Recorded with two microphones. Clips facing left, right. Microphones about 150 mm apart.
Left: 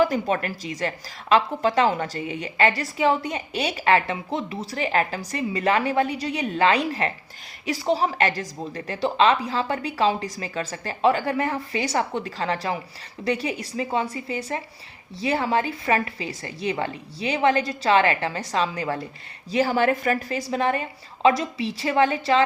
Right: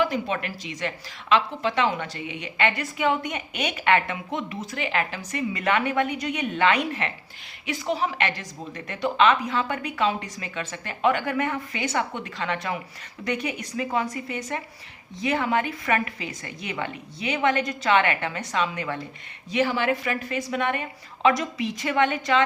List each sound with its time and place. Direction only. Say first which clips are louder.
0.0 s a woman's voice: left 4 dB; 40° left (ahead or behind)